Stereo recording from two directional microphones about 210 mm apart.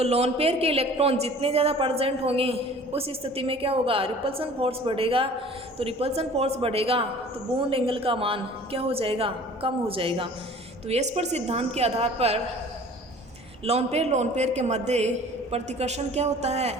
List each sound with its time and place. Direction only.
0.0 s a man's voice: 30° right (ahead or behind)
13.7 s a woman's voice: 30° right (ahead or behind)